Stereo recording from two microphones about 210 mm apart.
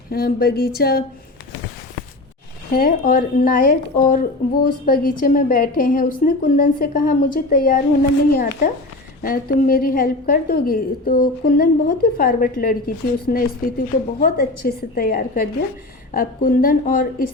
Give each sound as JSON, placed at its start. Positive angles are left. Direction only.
{"t": 0.1, "sound": "a woman's voice", "side_deg": 45}
{"t": 2.7, "sound": "a woman's voice", "side_deg": 40}